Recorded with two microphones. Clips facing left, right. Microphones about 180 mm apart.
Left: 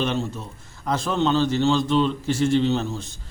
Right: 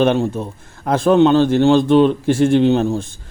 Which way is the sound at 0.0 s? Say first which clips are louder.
Right 10 dB; 55° right (ahead or behind).